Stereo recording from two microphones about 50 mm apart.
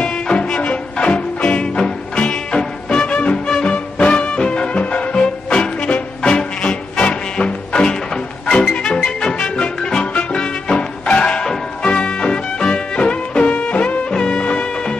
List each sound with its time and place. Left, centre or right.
0.0 s music: centre
3.4 s music: centre